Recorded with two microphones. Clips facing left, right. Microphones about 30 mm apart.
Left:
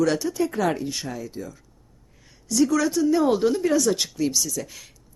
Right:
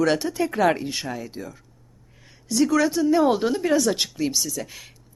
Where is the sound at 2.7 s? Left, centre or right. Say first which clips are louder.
Right 4 dB; centre.